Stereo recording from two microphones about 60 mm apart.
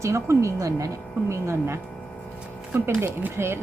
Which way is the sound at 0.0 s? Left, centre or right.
Right.